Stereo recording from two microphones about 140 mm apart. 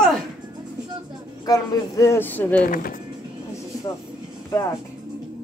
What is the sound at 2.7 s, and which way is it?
Speech, 80° left.